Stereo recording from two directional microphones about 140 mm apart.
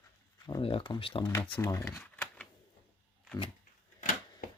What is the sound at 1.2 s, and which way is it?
Speech, 20° left (ahead or behind).